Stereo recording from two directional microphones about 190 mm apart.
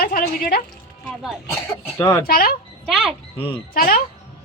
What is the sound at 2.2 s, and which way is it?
Speech, 50° left (ahead or behind).